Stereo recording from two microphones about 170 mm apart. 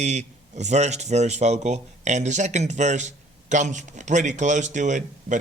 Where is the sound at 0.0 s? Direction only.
45° right (ahead or behind).